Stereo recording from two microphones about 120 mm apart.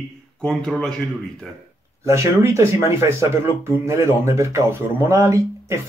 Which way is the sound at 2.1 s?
25° right (ahead or behind).